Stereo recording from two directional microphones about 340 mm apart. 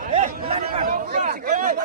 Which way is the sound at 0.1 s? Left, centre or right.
Centre.